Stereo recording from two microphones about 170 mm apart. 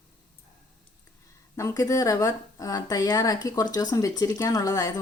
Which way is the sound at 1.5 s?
20° left (ahead or behind).